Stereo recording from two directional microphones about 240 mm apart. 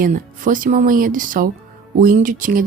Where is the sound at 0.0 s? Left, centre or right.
Right.